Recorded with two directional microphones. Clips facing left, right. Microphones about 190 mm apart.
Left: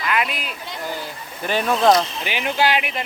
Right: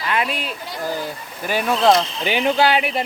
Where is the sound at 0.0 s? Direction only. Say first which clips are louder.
Right 1 dB; 30° right (ahead or behind).